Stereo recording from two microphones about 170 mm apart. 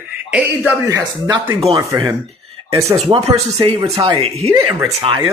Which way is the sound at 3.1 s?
25° right (ahead or behind).